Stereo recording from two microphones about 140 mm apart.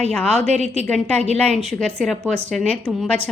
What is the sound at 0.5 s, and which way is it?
Speech, 50° right (ahead or behind).